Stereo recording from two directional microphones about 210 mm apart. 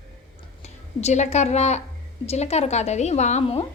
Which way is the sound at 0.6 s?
30° left (ahead or behind).